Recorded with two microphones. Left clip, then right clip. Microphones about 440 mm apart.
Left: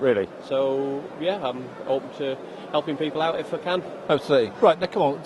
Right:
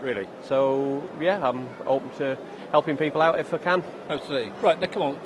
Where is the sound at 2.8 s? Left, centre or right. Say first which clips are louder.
Right 3 dB; right.